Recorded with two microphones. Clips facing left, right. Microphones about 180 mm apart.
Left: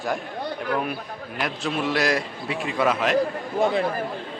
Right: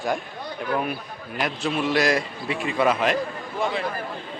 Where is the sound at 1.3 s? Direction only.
Centre (ahead or behind).